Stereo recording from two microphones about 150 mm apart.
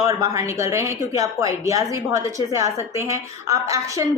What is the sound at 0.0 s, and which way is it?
A woman's voice, 20° right (ahead or behind).